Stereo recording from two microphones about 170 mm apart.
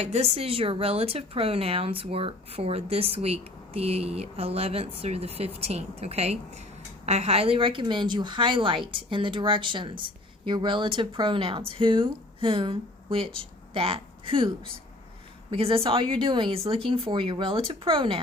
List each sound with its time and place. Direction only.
0.0 s a woman's voice: 40° right (ahead or behind)